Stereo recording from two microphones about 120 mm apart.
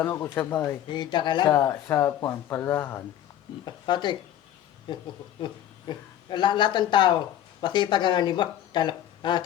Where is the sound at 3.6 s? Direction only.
40° left (ahead or behind).